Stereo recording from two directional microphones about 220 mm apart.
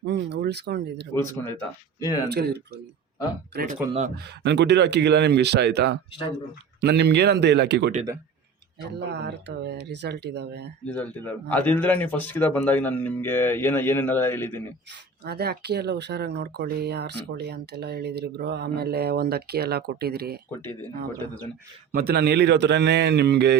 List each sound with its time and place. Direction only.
0.0 s speech: 50° right (ahead or behind)
1.1 s speech: 10° left (ahead or behind)
2.3 s speech: 45° right (ahead or behind)
9.0 s speech: 50° right (ahead or behind)
10.8 s speech: 5° left (ahead or behind)
15.2 s speech: 45° right (ahead or behind)
21.9 s speech: 45° right (ahead or behind)